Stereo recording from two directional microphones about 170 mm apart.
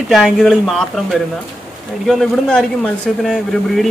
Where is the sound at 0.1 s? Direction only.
Centre (ahead or behind).